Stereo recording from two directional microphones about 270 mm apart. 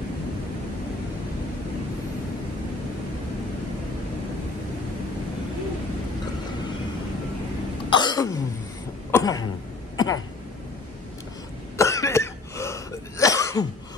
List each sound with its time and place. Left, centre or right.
7.9 s throat clearing: centre
9.1 s cough: centre
9.9 s a sound: centre
11.7 s cough: centre